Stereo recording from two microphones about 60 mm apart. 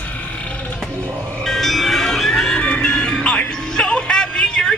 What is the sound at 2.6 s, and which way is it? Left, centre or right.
Music, centre.